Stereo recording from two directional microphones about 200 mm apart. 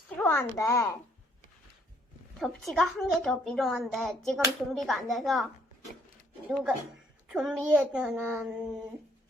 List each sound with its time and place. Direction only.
0.2 s a child's voice: 10° left (ahead or behind)
2.4 s a woman's voice: centre (ahead or behind)
6.5 s a woman's voice: centre (ahead or behind)